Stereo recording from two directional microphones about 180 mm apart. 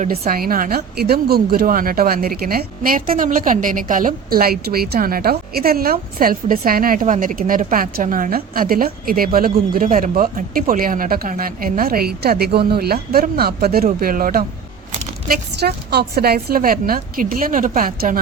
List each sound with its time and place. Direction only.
0.0 s a woman's voice: 55° right (ahead or behind)
15.3 s a woman's voice: 65° right (ahead or behind)